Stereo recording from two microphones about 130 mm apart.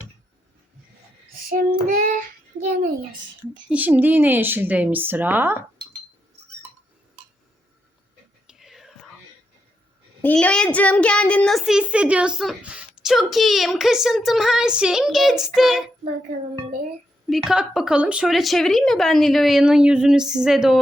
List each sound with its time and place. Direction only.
1.9 s child singing: 90° right
3.7 s speech: 15° right (ahead or behind)
8.4 s whispering: centre (ahead or behind)
10.2 s a child's voice: 10° left (ahead or behind); by 15.8 s 5° right (ahead or behind)
17.2 s a child's voice: centre (ahead or behind)